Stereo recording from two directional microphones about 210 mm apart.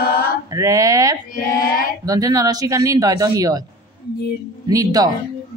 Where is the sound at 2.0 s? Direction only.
15° right (ahead or behind).